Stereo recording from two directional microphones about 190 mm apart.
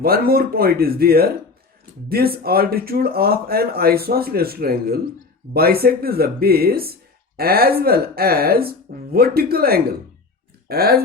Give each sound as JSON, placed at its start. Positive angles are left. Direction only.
{"t": 0.0, "sound": "speech", "side_deg": -55}